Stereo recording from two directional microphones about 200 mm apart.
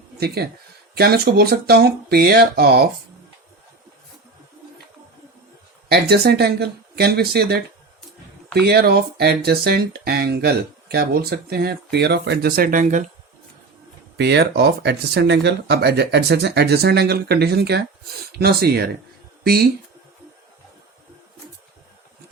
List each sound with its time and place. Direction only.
0.2 s speech: 50° right (ahead or behind)
5.9 s speech: 55° right (ahead or behind); by 13.1 s 40° right (ahead or behind)
14.2 s speech: 55° right (ahead or behind)